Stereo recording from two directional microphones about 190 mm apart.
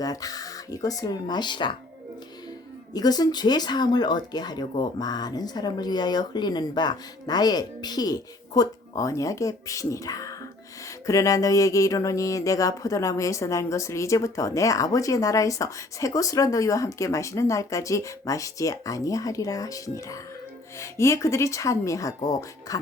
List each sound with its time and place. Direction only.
0.0 s speech: 20° left (ahead or behind)
2.9 s speech: 20° left (ahead or behind)
10.8 s a sound: 15° left (ahead or behind)